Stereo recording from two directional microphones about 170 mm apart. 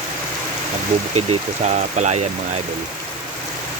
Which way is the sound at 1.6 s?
45° right (ahead or behind).